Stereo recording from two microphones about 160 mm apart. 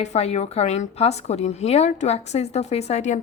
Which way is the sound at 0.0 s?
40° left (ahead or behind).